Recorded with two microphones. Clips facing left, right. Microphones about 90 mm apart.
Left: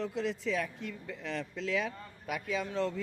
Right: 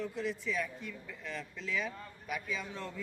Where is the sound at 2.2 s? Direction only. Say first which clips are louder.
Left 5 dB; 80° left.